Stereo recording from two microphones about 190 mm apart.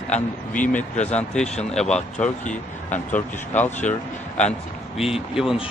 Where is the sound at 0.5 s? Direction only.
10° left (ahead or behind).